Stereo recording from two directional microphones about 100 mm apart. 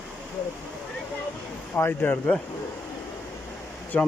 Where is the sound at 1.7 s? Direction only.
20° left (ahead or behind).